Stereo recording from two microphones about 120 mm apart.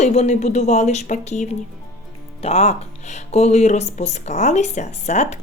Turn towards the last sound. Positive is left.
turn(degrees=70)  # may be behind; listen again after turning